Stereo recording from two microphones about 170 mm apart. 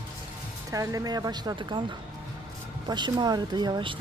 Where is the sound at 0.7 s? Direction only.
20° right (ahead or behind).